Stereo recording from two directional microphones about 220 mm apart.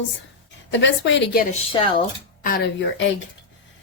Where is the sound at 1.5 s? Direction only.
25° left (ahead or behind).